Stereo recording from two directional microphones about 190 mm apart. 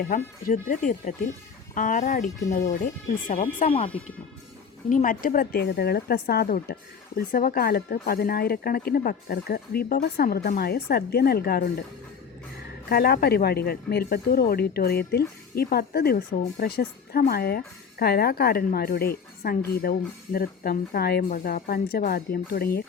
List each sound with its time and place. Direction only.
0.1 s speech: 45° left (ahead or behind)
3.7 s speech: 30° left (ahead or behind)
4.9 s speech: 45° left (ahead or behind)
12.9 s speech: 55° left (ahead or behind)